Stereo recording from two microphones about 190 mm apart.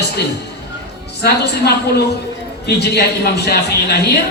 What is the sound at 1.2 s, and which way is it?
Speech, 60° left (ahead or behind).